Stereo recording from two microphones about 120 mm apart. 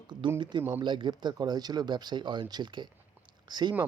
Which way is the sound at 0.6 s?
20° right (ahead or behind).